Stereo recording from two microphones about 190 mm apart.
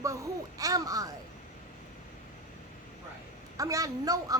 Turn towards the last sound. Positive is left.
turn(degrees=-20)  # may be behind; listen again after turning